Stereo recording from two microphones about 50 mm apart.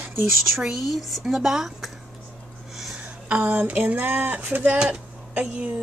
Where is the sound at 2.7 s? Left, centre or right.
Centre.